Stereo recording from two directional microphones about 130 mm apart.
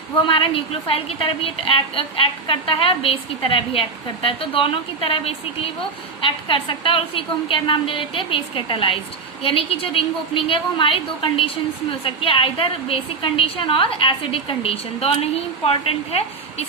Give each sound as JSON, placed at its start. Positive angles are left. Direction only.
{"t": 0.3, "sound": "a woman's voice", "side_deg": 45}